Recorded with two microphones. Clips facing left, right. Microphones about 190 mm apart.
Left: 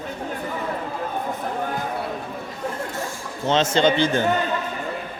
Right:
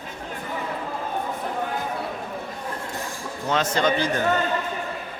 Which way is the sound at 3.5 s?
25° left (ahead or behind).